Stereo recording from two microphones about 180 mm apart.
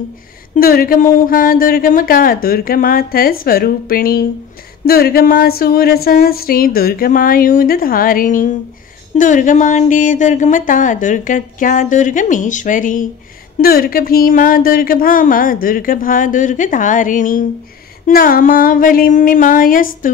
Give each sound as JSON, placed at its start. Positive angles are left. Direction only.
{"t": 0.6, "sound": "speech", "side_deg": 55}